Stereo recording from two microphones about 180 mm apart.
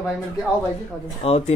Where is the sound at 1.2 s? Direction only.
35° left (ahead or behind).